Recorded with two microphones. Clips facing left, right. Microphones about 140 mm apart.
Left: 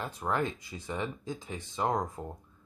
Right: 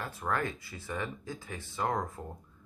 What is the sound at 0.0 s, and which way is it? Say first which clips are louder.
Speech: left 2 dB; 20° left (ahead or behind).